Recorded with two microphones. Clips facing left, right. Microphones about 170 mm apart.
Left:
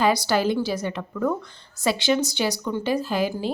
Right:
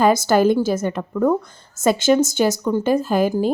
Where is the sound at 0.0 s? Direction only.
45° right (ahead or behind).